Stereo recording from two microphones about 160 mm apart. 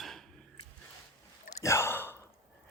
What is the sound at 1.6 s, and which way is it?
Gasp, 15° left (ahead or behind).